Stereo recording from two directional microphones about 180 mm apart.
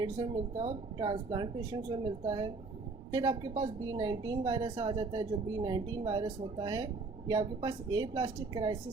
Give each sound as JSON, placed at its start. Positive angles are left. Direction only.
{"t": 0.5, "sound": "a woman's voice", "side_deg": -40}
{"t": 0.9, "sound": "speech", "side_deg": -25}